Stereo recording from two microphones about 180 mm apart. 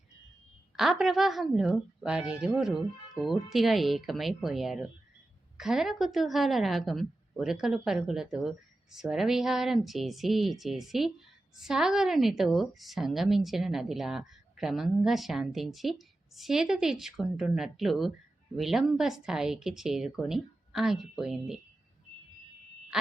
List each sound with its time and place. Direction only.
0.8 s a woman's voice: centre (ahead or behind)